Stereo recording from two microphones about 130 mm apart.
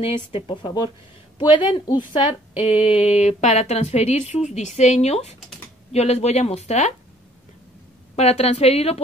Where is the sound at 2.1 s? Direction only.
50° left (ahead or behind).